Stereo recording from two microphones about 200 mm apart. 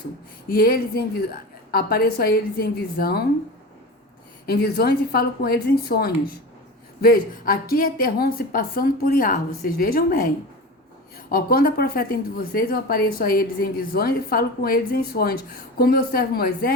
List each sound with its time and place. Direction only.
0.4 s a woman's voice: 50° left (ahead or behind)
4.4 s a woman's voice: 55° left (ahead or behind)
11.3 s a woman's voice: 45° left (ahead or behind)